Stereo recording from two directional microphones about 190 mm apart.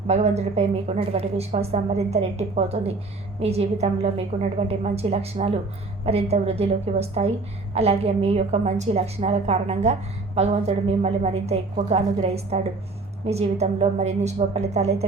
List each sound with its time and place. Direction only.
0.1 s a woman's voice: 35° right (ahead or behind)